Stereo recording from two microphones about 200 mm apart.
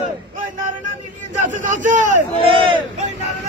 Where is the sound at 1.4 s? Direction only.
40° right (ahead or behind).